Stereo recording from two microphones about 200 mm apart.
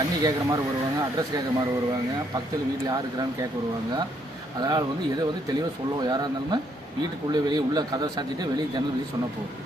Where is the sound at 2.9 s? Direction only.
15° right (ahead or behind).